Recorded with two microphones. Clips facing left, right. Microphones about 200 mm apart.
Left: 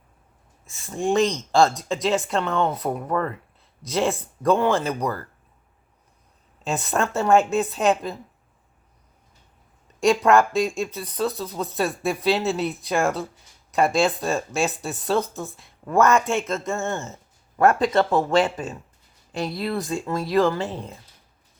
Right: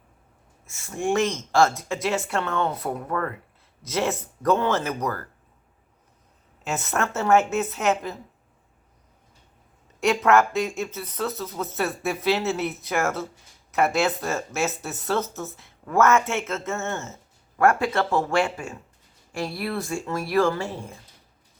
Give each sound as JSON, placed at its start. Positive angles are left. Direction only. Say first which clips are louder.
{"t": 0.6, "sound": "speech", "louder": "left 2 dB", "side_deg": 15}
{"t": 6.7, "sound": "speech", "louder": "left 3 dB", "side_deg": 15}
{"t": 10.0, "sound": "speech", "louder": "left 2 dB", "side_deg": 15}